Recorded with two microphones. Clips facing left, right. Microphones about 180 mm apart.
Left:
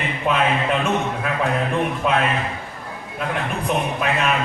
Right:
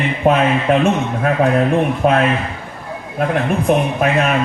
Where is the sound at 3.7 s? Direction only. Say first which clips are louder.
Right 6 dB; 50° right (ahead or behind).